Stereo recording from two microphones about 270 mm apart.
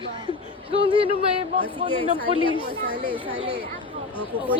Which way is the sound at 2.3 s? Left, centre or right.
Centre.